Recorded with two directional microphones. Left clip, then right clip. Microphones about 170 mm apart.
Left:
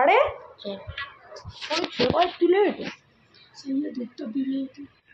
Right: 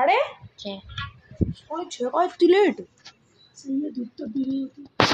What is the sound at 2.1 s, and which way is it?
Speech, 25° right (ahead or behind).